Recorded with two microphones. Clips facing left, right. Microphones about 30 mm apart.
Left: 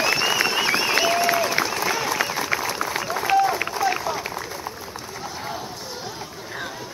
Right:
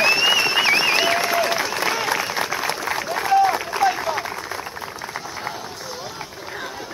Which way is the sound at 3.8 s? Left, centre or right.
Right.